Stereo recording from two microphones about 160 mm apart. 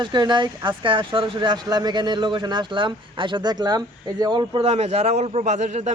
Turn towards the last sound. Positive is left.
turn(degrees=-50)  # may be behind; listen again after turning